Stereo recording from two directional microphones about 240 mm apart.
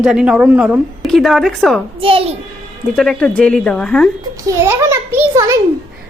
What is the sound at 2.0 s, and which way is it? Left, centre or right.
Speech, right.